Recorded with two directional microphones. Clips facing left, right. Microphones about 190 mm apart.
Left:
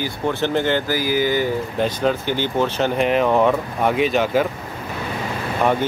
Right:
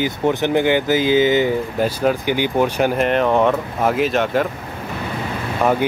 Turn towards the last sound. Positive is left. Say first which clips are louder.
# right 2 dB
turn(degrees=-5)  # may be behind; listen again after turning